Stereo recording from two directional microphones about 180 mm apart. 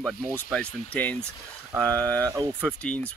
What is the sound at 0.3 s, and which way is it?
Speech, 5° left (ahead or behind).